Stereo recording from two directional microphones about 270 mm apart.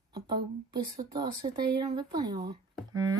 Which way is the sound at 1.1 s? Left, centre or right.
Centre.